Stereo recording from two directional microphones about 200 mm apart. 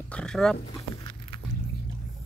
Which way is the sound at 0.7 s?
20° left (ahead or behind).